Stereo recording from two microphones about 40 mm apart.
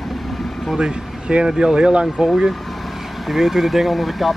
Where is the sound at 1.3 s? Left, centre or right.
Right.